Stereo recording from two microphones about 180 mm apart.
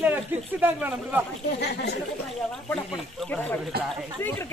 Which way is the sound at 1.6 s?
65° left (ahead or behind).